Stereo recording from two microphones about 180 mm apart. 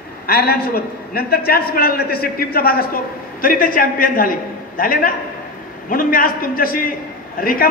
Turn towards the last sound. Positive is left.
turn(degrees=55)  # may be behind; listen again after turning